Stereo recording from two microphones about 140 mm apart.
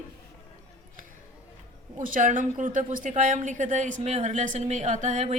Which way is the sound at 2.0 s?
70° right (ahead or behind).